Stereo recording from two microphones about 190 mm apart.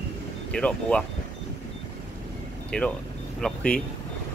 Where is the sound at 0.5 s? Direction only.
5° left (ahead or behind).